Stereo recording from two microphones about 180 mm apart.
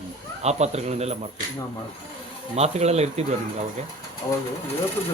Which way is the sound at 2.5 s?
35° right (ahead or behind).